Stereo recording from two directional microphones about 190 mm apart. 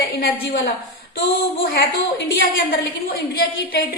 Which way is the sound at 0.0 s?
60° left (ahead or behind).